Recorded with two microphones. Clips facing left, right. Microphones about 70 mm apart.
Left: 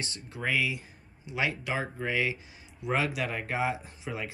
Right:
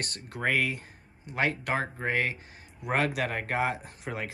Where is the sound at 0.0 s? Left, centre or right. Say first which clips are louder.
Right 3 dB; right.